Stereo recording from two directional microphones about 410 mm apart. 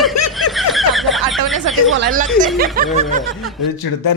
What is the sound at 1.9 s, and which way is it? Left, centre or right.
Speech, right.